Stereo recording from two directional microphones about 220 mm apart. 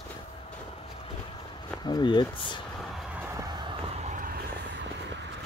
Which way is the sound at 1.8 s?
20° left (ahead or behind).